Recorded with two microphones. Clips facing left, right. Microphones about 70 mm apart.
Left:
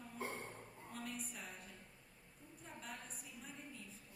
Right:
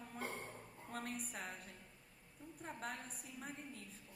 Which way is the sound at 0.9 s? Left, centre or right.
Right.